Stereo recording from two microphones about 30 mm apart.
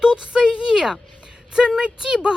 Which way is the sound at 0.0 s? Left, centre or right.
Right.